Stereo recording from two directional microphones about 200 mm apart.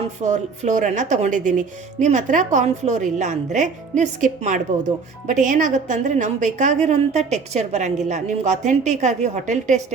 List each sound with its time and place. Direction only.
0.2 s a woman's voice: 35° right (ahead or behind)